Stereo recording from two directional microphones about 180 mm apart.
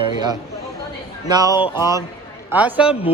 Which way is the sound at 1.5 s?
20° left (ahead or behind).